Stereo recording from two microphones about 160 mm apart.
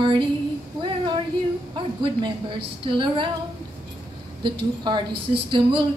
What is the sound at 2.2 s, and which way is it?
Speech, 30° right (ahead or behind).